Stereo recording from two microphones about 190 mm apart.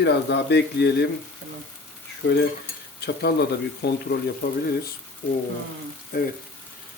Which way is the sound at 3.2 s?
60° left (ahead or behind).